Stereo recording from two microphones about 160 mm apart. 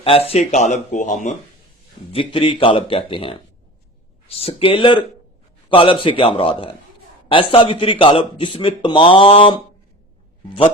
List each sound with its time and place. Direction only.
0.0 s speech: 35° left (ahead or behind)
2.1 s speech: 30° left (ahead or behind)